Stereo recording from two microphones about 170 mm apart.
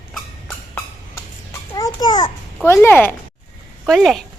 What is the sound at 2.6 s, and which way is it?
Speech, 15° left (ahead or behind).